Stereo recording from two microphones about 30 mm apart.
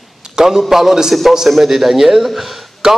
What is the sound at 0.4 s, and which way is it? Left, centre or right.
A man's voice, centre.